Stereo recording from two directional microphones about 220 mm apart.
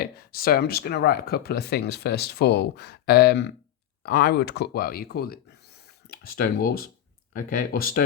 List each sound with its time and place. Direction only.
0.0 s speech: 45° left (ahead or behind)